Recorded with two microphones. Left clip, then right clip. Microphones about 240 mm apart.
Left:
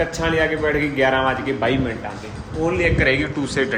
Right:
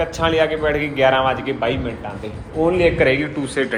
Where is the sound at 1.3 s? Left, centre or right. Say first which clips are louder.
Even; left.